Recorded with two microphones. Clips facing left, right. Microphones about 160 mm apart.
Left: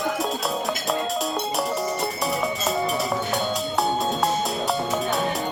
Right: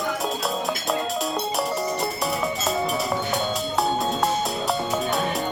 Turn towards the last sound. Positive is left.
turn(degrees=0)  # may be behind; listen again after turning